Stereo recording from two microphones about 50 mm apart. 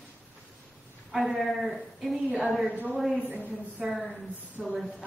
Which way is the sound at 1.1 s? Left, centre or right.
Centre.